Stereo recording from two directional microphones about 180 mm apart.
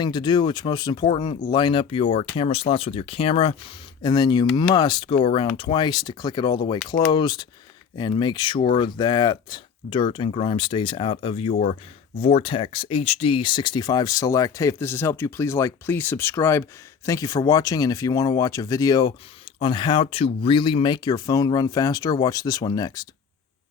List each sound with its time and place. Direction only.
0.0 s speech: 25° left (ahead or behind)
11.5 s speech: 50° left (ahead or behind)
12.1 s speech: 30° left (ahead or behind)